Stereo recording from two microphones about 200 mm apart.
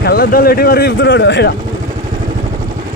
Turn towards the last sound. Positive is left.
turn(degrees=60)  # may be behind; listen again after turning